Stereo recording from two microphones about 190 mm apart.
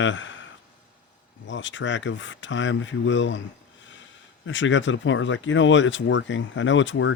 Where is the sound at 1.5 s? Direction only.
75° left (ahead or behind).